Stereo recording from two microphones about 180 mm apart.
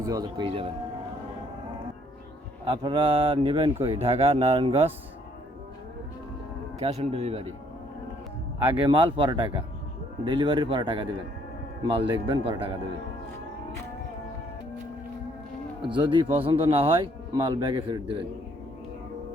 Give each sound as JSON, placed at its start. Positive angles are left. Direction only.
{"t": 0.0, "sound": "speech", "side_deg": -20}
{"t": 2.6, "sound": "speech", "side_deg": -30}
{"t": 6.7, "sound": "speech", "side_deg": -35}
{"t": 8.6, "sound": "speech", "side_deg": -30}
{"t": 15.8, "sound": "speech", "side_deg": -30}